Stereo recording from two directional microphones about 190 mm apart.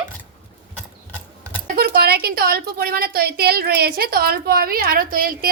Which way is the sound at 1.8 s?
55° right (ahead or behind).